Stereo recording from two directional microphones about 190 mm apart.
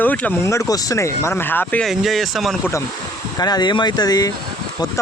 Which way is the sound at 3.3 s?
20° left (ahead or behind).